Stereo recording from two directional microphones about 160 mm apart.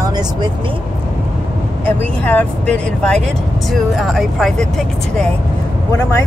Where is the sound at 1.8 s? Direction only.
10° left (ahead or behind).